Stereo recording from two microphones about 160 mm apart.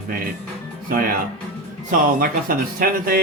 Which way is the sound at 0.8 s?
65° right (ahead or behind).